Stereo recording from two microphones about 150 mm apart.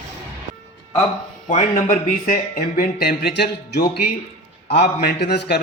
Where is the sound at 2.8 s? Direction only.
90° left.